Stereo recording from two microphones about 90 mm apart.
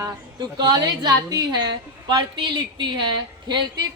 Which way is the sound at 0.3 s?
50° right (ahead or behind).